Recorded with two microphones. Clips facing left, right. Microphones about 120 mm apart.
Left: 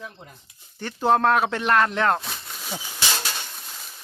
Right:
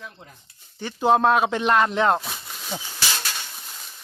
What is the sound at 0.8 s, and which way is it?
Speech, 10° right (ahead or behind).